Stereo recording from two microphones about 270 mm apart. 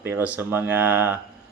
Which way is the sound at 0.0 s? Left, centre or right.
Centre.